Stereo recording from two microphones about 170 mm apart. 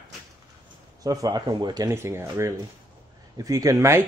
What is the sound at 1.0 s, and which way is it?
Speech, 20° right (ahead or behind).